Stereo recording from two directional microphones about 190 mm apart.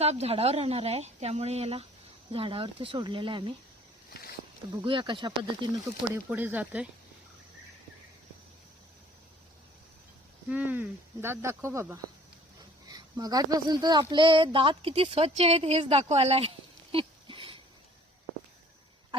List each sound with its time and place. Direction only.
0.0 s a woman's voice: 35° right (ahead or behind)
4.8 s speech: 25° right (ahead or behind)
6.0 s speech: 10° right (ahead or behind)
10.5 s speech: 10° right (ahead or behind); by 17.6 s 25° right (ahead or behind)